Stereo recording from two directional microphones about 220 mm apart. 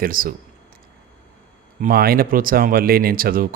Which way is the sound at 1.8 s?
40° right (ahead or behind).